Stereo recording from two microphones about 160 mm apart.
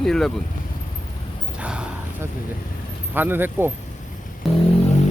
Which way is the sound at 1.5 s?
5° right (ahead or behind).